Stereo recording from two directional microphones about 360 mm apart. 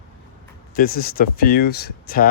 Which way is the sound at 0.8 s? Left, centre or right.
Left.